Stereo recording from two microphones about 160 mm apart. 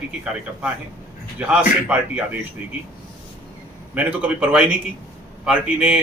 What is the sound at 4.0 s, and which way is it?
A man's voice, 10° right (ahead or behind).